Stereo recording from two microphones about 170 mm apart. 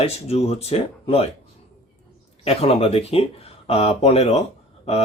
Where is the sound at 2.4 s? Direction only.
35° left (ahead or behind).